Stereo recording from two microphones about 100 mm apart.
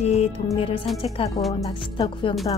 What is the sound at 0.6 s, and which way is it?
Speech, 65° left (ahead or behind).